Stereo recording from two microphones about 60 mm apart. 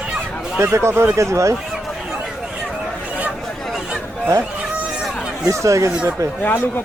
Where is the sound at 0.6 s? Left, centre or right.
Right.